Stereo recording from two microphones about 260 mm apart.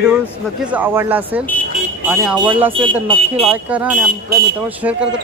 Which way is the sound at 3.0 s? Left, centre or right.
Right.